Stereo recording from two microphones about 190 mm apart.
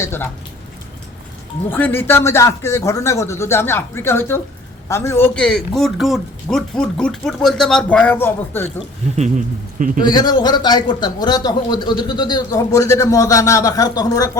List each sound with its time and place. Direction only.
0.0 s speech: 10° left (ahead or behind)
1.7 s a man's voice: 10° left (ahead or behind)
9.1 s speech: 40° right (ahead or behind)
10.1 s speech: 20° left (ahead or behind)